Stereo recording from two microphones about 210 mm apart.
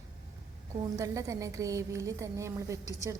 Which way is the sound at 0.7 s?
15° right (ahead or behind).